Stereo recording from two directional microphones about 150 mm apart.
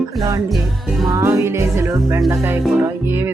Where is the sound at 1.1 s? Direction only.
20° right (ahead or behind).